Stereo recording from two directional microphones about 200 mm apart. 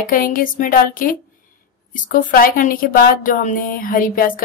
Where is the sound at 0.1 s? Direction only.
45° left (ahead or behind).